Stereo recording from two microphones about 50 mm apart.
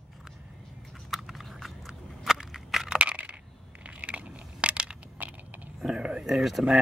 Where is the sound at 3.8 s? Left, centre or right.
Right.